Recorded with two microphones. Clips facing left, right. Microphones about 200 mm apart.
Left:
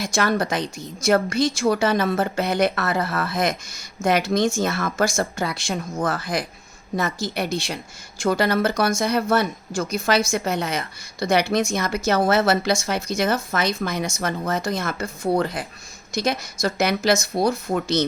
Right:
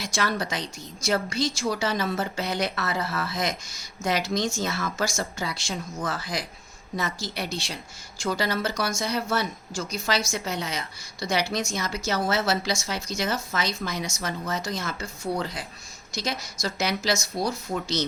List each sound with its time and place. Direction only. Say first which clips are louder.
0.0 s a woman's voice: left 6 dB; 50° left (ahead or behind)